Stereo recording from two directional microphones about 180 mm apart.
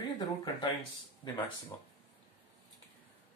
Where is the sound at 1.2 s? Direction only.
30° left (ahead or behind).